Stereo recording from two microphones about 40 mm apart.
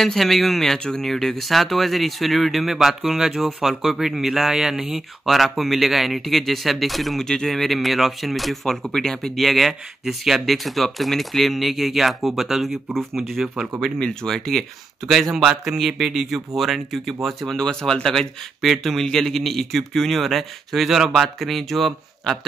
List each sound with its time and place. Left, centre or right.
0.0 s speech: centre
5.2 s speech: centre
7.2 s speech: centre
9.5 s speech: centre
14.2 s speech: centre
15.3 s speech: centre
17.6 s speech: centre
18.6 s speech: centre